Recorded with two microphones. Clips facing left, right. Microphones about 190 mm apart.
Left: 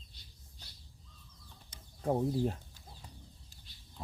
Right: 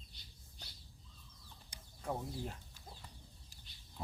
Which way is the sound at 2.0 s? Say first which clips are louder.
Left 11 dB; 40° left (ahead or behind).